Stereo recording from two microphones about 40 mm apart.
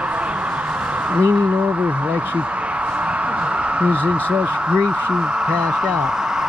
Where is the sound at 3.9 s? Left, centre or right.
Right.